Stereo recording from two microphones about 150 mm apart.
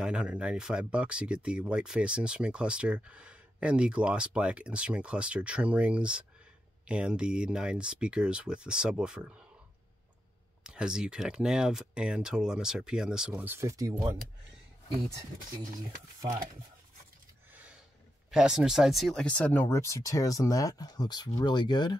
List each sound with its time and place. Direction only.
0.0 s speech: 5° right (ahead or behind)
10.6 s speech: 5° right (ahead or behind)
13.3 s speech: 15° right (ahead or behind)
18.3 s speech: 5° right (ahead or behind); by 21.9 s 30° left (ahead or behind)